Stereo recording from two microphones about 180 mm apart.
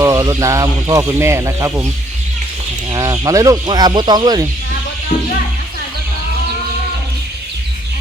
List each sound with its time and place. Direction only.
0.0 s speech: 20° right (ahead or behind)
2.9 s speech: 20° right (ahead or behind)